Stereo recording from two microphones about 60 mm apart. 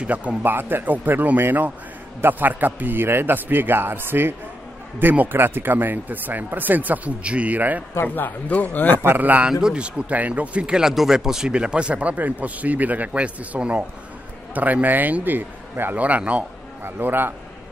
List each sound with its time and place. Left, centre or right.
0.0 s speech: right
0.4 s speech: right
8.1 s speech: left
9.0 s speech: right
9.5 s speech: centre; by 16.0 s right
16.0 s speech: right
16.8 s speech: right